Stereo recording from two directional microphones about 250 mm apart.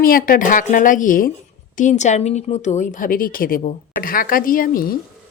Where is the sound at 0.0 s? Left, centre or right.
Left.